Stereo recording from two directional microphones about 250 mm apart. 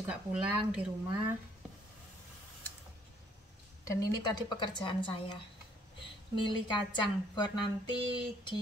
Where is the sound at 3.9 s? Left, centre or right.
Centre.